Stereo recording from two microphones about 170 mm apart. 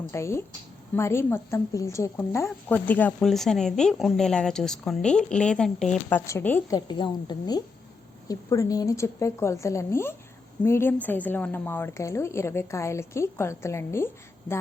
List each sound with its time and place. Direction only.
0.1 s a woman's voice: 15° left (ahead or behind)
6.7 s a woman's voice: 25° left (ahead or behind)